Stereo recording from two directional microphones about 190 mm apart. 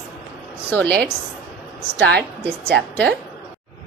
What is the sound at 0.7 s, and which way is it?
Speech, 5° left (ahead or behind).